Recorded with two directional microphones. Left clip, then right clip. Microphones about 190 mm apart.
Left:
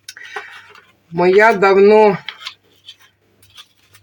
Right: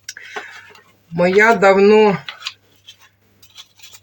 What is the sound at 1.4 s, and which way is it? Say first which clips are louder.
Speech: even; 25° left (ahead or behind).